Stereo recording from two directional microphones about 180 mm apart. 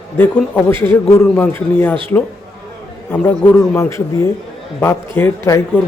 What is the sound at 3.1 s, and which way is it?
Speech, 10° left (ahead or behind).